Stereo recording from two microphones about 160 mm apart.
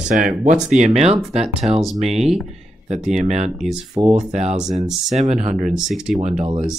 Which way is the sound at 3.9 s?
5° right (ahead or behind).